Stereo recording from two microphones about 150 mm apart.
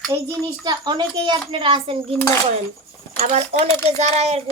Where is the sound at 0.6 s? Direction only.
30° right (ahead or behind).